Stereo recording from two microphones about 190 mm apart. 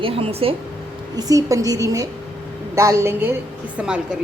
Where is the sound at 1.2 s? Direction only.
20° right (ahead or behind).